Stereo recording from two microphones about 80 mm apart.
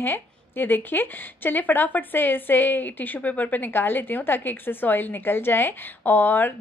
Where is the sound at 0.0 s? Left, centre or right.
Left.